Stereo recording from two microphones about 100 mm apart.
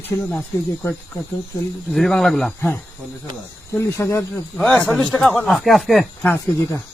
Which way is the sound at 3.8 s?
30° left (ahead or behind).